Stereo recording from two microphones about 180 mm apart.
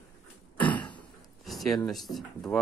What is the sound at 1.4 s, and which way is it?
Speech, centre (ahead or behind).